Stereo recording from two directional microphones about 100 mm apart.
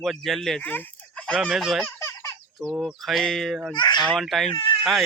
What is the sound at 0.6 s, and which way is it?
Fowl, 15° left (ahead or behind).